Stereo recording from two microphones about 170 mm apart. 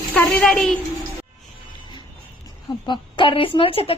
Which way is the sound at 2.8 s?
30° left (ahead or behind).